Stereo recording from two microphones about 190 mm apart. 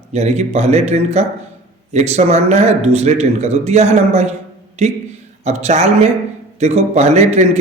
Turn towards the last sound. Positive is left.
turn(degrees=-35)  # may be behind; listen again after turning